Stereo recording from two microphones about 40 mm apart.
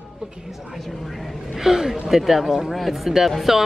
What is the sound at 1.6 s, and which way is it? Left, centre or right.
A woman's voice, centre.